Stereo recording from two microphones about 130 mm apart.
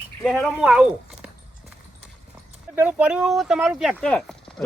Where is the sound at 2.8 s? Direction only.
10° right (ahead or behind).